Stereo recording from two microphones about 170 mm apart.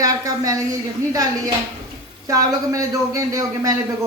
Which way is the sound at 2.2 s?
20° right (ahead or behind).